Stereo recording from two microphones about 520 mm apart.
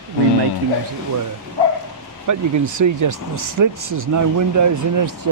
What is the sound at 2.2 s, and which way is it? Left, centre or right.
Speech, right.